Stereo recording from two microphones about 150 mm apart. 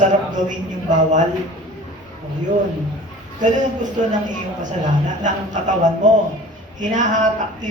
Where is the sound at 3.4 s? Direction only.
55° right (ahead or behind).